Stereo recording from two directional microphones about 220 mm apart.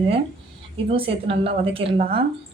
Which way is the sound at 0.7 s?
25° right (ahead or behind).